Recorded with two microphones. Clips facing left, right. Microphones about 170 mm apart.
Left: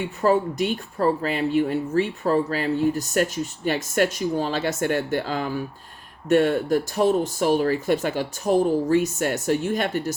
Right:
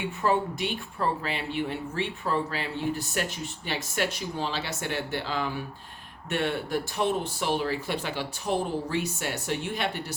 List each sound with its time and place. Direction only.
0.2 s speech: 40° left (ahead or behind)